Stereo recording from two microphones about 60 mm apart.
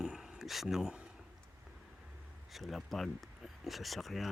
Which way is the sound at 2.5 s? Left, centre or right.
Centre.